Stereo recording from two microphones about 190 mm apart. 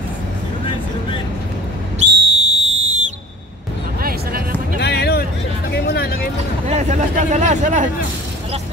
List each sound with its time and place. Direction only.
2.0 s whistle: 35° right (ahead or behind)
4.7 s music: 60° left (ahead or behind)
6.7 s a sound: 40° right (ahead or behind)